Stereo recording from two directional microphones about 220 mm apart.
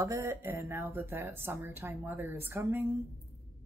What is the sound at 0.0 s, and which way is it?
A woman's voice, 15° right (ahead or behind).